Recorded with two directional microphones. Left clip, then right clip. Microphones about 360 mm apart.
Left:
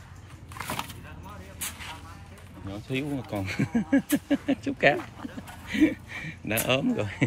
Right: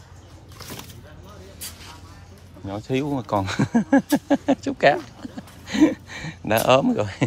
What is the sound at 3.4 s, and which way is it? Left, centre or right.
Speech, centre.